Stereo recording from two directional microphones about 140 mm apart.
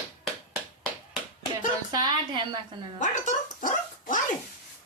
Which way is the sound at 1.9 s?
30° right (ahead or behind).